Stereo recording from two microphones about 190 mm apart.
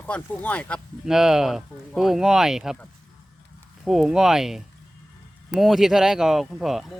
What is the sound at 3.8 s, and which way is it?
Speech, centre (ahead or behind).